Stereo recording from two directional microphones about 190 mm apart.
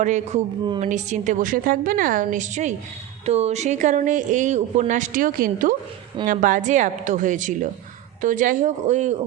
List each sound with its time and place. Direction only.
0.0 s a woman's voice: 40° right (ahead or behind)